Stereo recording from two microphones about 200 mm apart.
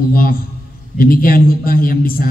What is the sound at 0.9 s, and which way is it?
A man's voice, 45° left (ahead or behind).